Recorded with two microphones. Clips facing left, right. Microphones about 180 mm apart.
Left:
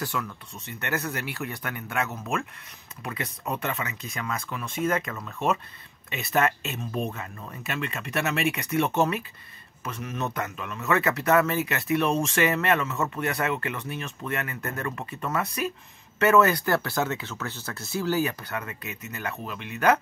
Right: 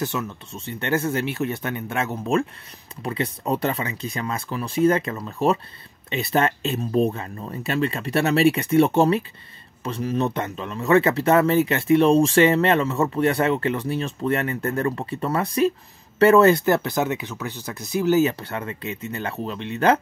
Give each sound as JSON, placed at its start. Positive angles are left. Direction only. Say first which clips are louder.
{"t": 0.0, "sound": "speech", "louder": "right 5 dB", "side_deg": -25}